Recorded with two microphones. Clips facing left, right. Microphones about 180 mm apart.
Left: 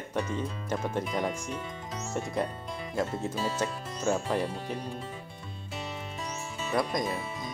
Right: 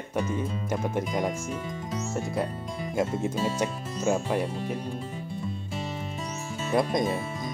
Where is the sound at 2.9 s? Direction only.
20° right (ahead or behind).